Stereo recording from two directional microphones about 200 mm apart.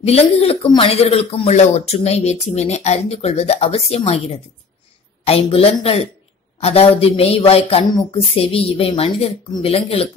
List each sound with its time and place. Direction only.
0.0 s speech: 30° left (ahead or behind)
5.2 s speech: 30° left (ahead or behind)